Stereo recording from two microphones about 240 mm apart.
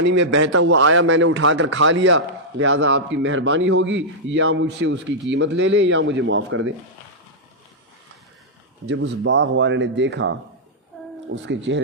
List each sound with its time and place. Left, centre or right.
0.0 s a man's voice: right
8.9 s a man's voice: right
11.4 s a man's voice: right